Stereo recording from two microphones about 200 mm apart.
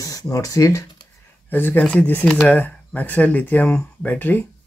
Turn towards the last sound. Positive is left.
turn(degrees=10)  # may be behind; listen again after turning